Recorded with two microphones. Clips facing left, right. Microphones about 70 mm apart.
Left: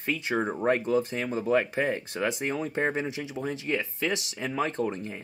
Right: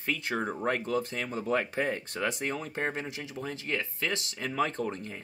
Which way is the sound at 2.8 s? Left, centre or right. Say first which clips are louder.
Left 5 dB; left.